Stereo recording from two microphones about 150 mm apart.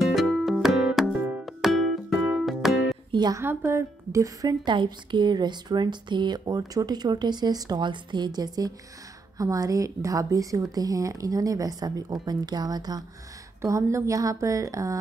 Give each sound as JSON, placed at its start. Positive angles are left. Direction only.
{"t": 0.0, "sound": "music", "side_deg": 0}
{"t": 3.1, "sound": "a woman's voice", "side_deg": -25}